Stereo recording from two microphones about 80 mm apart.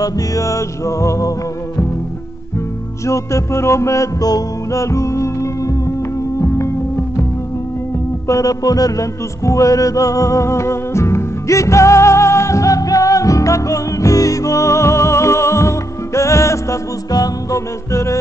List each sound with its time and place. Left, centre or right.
0.0 s music: left
3.1 s music: left
8.3 s music: left